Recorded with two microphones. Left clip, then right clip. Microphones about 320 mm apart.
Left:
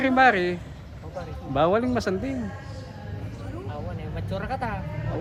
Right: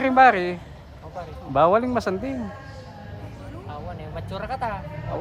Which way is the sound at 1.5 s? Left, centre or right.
Centre.